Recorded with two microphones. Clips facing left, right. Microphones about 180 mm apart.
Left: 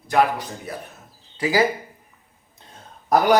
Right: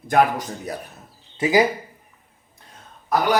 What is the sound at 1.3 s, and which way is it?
Speech, 20° right (ahead or behind).